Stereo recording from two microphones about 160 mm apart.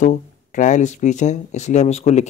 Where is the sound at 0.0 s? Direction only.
50° left (ahead or behind).